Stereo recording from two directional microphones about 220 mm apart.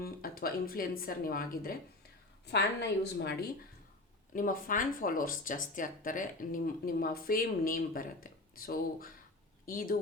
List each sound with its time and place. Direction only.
0.0 s a woman's voice: 40° left (ahead or behind)
4.4 s speech: 40° left (ahead or behind)